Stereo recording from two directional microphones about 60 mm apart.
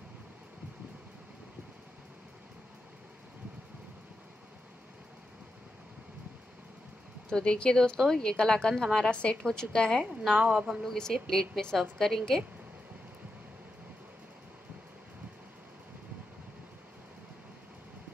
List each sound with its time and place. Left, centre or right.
7.2 s speech: centre
10.3 s speech: right
10.7 s a woman's voice: centre